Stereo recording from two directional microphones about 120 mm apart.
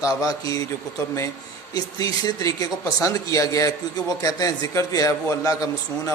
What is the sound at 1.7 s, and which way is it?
Speech, 30° left (ahead or behind).